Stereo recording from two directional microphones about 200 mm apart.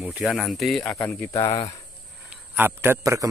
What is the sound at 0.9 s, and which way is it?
Speech, 15° left (ahead or behind).